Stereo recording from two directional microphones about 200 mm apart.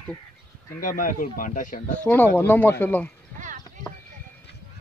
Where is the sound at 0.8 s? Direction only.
40° left (ahead or behind).